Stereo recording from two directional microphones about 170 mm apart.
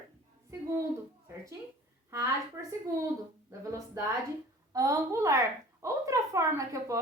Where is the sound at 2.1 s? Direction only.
20° right (ahead or behind).